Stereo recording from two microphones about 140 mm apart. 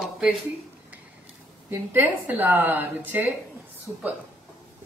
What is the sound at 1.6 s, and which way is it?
A woman's voice, 15° right (ahead or behind).